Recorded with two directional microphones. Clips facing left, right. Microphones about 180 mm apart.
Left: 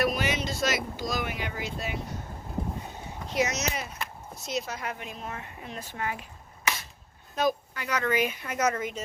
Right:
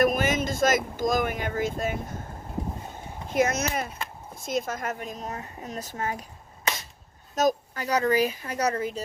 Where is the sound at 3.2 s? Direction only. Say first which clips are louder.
Right 4 dB; 50° right (ahead or behind).